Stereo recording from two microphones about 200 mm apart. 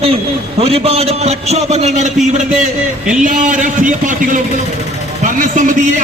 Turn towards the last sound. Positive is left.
turn(degrees=-40)  # may be behind; listen again after turning